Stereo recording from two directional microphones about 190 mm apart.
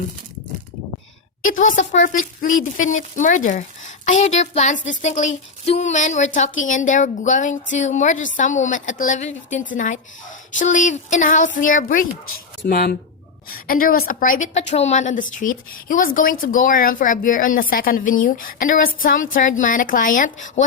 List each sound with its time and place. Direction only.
1.4 s a woman's voice: 45° left (ahead or behind)